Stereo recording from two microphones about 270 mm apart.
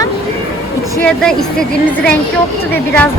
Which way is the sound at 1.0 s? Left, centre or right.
Centre.